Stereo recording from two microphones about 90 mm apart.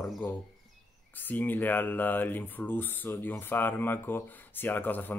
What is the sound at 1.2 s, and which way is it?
Speech, 20° left (ahead or behind).